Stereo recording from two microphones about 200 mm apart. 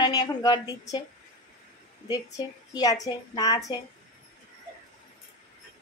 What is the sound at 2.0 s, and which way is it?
A woman's voice, 20° left (ahead or behind).